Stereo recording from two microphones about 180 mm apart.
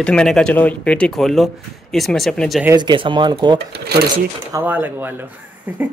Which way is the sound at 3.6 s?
65° right (ahead or behind).